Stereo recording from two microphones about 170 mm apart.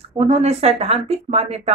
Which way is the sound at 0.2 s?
40° right (ahead or behind).